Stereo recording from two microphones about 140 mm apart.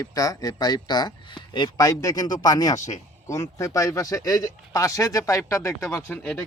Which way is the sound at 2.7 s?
60° left (ahead or behind).